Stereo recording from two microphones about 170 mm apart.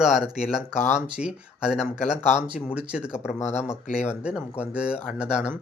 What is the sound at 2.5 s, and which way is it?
Speech, 5° right (ahead or behind).